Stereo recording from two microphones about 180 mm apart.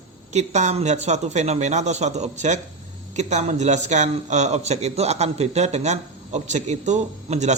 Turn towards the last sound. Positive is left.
turn(degrees=-40)  # may be behind; listen again after turning